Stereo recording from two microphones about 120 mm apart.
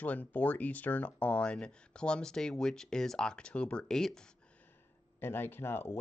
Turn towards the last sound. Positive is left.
turn(degrees=20)  # may be behind; listen again after turning